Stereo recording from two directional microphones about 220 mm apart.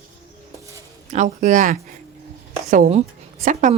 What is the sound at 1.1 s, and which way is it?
A woman's voice, 35° right (ahead or behind).